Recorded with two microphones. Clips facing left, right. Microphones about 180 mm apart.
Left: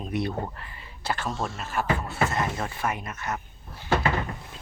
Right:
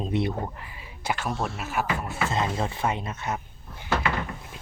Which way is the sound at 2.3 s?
25° right (ahead or behind).